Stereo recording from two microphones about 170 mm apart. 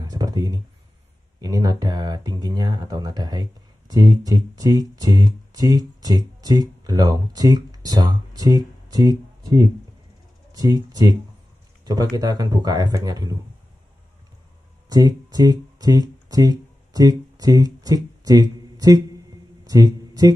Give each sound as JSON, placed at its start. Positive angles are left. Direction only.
{"t": 0.0, "sound": "speech", "side_deg": -20}
{"t": 14.9, "sound": "speech", "side_deg": -20}
{"t": 19.6, "sound": "a sound", "side_deg": -20}